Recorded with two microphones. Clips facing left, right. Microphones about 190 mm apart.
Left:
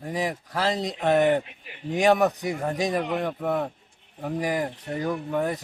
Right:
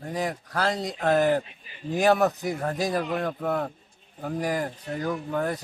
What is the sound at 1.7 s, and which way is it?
Speech, 70° left (ahead or behind).